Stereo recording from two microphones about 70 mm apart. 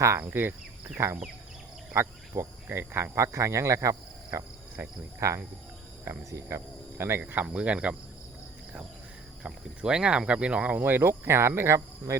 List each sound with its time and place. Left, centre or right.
0.2 s speech: right
0.9 s speech: right
1.9 s cricket: right
4.8 s speech: right
5.2 s cricket: right
7.0 s speech: right
7.4 s cricket: centre
9.4 s speech: centre; by 12.1 s right